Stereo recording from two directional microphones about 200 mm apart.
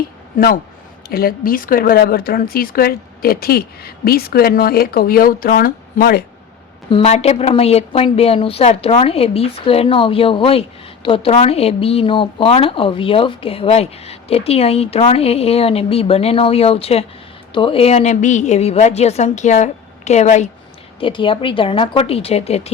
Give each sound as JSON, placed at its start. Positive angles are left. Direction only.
{"t": 0.3, "sound": "speech", "side_deg": 45}
{"t": 6.9, "sound": "a woman's voice", "side_deg": 30}